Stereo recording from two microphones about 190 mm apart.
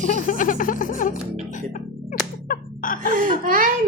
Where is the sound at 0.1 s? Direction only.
45° left (ahead or behind).